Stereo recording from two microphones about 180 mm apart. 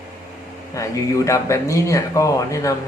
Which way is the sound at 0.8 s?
15° left (ahead or behind).